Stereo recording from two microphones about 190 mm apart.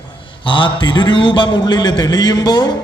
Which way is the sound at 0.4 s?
25° left (ahead or behind).